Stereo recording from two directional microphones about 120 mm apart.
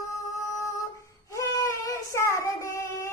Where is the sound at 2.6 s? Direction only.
20° left (ahead or behind).